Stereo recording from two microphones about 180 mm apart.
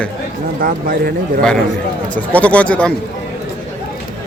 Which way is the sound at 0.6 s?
55° right (ahead or behind).